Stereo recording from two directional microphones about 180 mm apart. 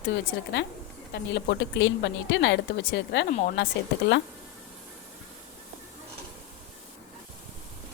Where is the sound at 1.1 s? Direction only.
70° left (ahead or behind).